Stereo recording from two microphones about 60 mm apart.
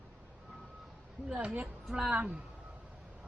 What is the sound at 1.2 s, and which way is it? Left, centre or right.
Speech, centre.